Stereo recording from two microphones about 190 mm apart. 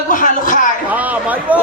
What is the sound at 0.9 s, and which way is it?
Speech, 10° right (ahead or behind).